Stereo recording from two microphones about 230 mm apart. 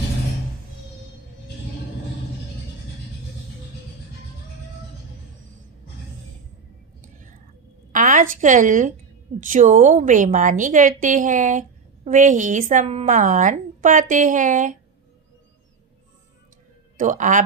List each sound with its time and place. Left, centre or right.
7.9 s a woman's voice: right
17.0 s a woman's voice: right